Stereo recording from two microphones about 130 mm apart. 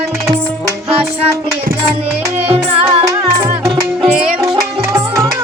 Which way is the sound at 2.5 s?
45° right (ahead or behind).